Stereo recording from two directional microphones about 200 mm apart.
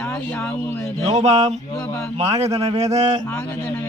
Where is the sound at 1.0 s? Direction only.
35° right (ahead or behind).